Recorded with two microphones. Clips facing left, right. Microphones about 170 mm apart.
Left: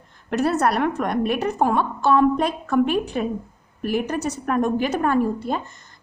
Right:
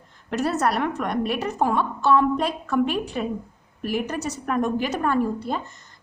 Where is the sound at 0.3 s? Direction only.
55° left (ahead or behind).